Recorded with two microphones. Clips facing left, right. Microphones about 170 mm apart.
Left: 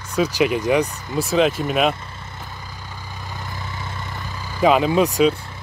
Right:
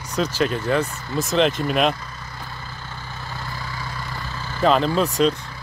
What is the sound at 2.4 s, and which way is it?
Vehicle, 15° left (ahead or behind).